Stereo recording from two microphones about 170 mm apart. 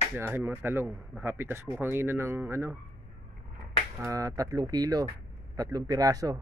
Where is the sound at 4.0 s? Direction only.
20° right (ahead or behind).